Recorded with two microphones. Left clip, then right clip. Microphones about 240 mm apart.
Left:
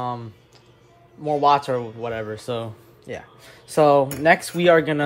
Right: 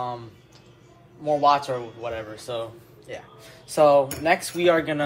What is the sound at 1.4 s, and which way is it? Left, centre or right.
Speech, left.